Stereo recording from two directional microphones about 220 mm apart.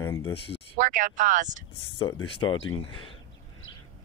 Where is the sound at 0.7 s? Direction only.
35° right (ahead or behind).